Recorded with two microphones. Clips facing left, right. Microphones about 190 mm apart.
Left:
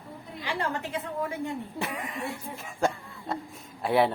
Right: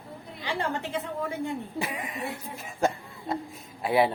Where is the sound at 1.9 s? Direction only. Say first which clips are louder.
Even; 15° right (ahead or behind).